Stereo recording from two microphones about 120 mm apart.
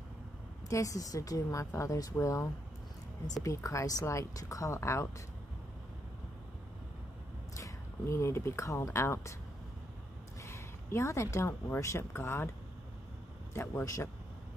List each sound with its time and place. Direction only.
0.7 s a woman's voice: 25° left (ahead or behind)
7.5 s speech: 25° left (ahead or behind)
10.4 s speech: 25° left (ahead or behind)
13.5 s a woman's voice: 20° left (ahead or behind)